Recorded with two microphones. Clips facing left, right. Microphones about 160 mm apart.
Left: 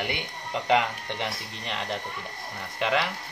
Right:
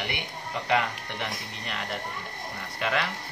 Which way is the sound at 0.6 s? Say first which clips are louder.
Left 3 dB; 20° left (ahead or behind).